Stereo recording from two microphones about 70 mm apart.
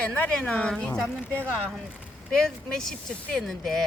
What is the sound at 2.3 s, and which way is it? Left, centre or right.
Speech, centre.